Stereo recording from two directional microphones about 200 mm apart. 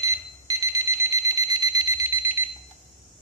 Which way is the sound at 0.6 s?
15° right (ahead or behind).